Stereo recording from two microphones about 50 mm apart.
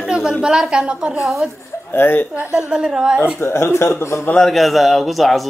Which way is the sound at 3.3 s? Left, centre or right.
Left.